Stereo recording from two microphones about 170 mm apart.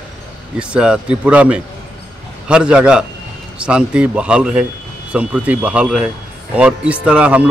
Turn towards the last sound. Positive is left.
turn(degrees=-5)  # may be behind; listen again after turning